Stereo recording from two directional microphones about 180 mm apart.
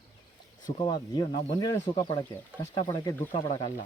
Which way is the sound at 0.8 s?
25° left (ahead or behind).